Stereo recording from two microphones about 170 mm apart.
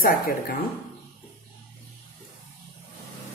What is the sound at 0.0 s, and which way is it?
Speech, 60° left (ahead or behind).